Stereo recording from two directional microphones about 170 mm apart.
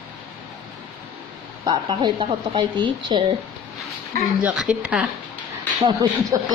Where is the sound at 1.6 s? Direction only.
25° right (ahead or behind).